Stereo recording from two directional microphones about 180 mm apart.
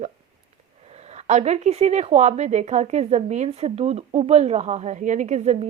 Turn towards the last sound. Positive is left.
turn(degrees=-40)  # may be behind; listen again after turning